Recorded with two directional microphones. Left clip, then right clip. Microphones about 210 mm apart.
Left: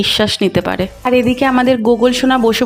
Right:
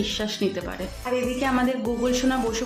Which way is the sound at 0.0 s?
45° left (ahead or behind).